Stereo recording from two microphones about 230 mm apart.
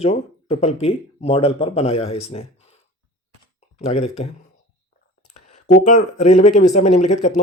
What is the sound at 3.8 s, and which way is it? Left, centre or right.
Speech, left.